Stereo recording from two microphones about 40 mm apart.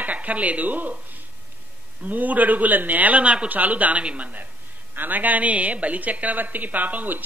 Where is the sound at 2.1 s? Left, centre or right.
Right.